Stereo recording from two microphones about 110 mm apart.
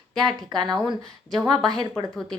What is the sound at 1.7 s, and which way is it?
Speech, 40° right (ahead or behind).